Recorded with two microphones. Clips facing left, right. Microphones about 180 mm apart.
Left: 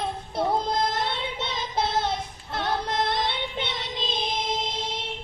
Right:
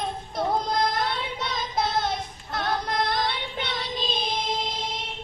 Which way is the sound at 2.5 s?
25° left (ahead or behind).